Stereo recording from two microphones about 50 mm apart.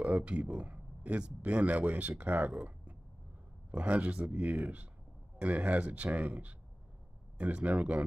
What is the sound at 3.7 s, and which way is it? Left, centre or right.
Speech, right.